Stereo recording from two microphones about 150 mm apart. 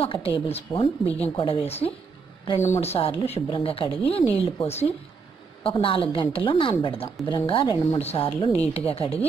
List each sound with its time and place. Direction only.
0.0 s a woman's voice: 40° left (ahead or behind)
2.6 s a woman's voice: 45° left (ahead or behind)